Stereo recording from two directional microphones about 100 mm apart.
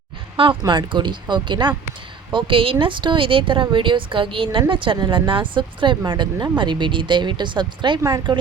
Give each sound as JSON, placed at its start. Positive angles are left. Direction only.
{"t": 0.6, "sound": "speech", "side_deg": -50}
{"t": 2.3, "sound": "speech", "side_deg": -60}
{"t": 8.0, "sound": "speech", "side_deg": -40}